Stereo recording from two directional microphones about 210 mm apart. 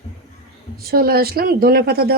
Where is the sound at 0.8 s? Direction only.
45° right (ahead or behind).